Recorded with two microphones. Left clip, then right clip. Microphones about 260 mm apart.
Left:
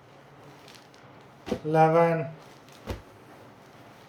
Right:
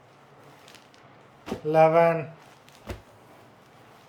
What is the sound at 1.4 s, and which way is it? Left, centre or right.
Speech, centre.